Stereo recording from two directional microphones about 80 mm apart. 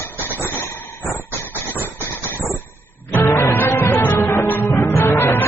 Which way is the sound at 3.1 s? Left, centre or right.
Left.